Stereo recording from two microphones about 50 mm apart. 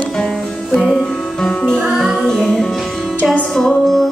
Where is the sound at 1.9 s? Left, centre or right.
Centre.